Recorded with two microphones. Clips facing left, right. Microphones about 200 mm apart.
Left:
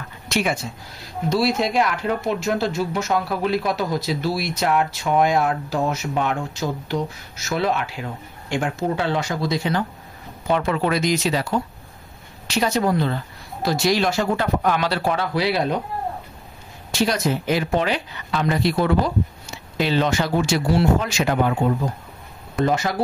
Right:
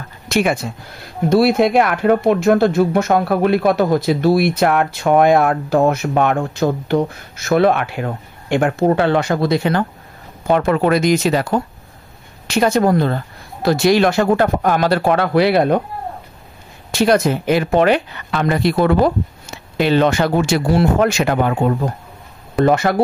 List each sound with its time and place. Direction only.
0.3 s speech: 55° right (ahead or behind)
16.9 s speech: 55° right (ahead or behind)